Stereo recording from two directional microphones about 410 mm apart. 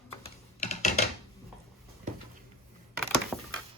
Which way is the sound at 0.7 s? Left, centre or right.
Centre.